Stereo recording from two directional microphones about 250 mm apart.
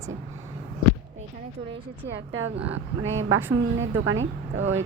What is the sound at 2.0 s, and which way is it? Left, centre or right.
Speech, right.